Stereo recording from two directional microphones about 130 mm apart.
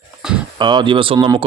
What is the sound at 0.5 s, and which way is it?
Speech, 35° right (ahead or behind).